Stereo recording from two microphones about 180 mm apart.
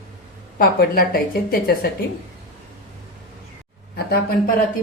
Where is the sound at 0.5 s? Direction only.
55° left (ahead or behind).